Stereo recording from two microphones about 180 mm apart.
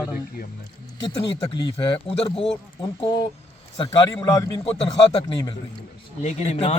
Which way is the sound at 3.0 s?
25° left (ahead or behind).